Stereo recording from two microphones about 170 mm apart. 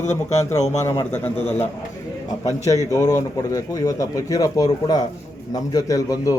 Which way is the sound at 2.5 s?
20° left (ahead or behind).